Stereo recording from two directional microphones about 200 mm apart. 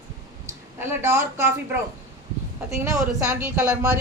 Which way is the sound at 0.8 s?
15° right (ahead or behind).